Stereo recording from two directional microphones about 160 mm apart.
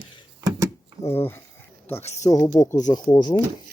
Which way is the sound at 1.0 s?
15° left (ahead or behind).